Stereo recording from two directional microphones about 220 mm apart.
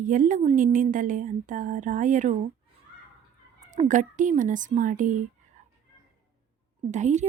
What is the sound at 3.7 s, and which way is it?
Speech, 35° right (ahead or behind).